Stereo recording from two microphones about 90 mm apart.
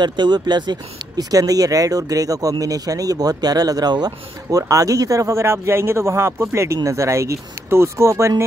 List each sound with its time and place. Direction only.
0.0 s speech: 55° right (ahead or behind); by 8.5 s 35° right (ahead or behind)